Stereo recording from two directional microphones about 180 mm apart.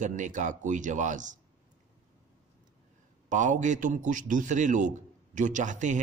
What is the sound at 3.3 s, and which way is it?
A man's voice, 45° right (ahead or behind).